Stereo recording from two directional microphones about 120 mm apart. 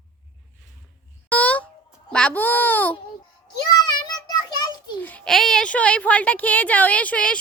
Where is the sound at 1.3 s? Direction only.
10° left (ahead or behind).